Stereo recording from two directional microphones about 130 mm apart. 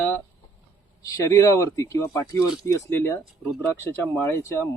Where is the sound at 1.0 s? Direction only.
25° left (ahead or behind).